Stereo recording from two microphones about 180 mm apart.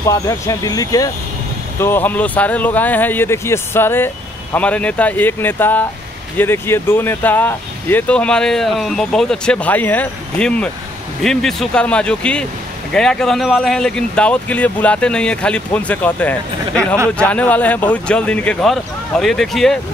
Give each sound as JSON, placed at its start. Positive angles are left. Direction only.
{"t": 0.0, "sound": "speech", "side_deg": 20}